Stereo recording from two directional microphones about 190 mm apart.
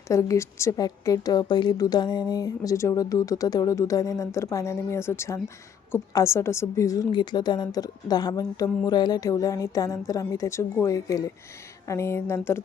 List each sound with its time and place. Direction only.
0.1 s a woman's voice: 15° left (ahead or behind)